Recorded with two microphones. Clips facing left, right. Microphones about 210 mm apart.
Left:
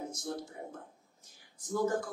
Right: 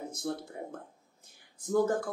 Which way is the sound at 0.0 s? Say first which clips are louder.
Right 3 dB; 60° right (ahead or behind).